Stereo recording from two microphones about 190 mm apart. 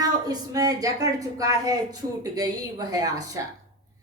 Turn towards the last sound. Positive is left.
turn(degrees=-20)  # may be behind; listen again after turning